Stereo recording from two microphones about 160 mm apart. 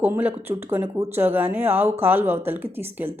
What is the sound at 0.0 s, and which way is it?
Speech, 10° right (ahead or behind).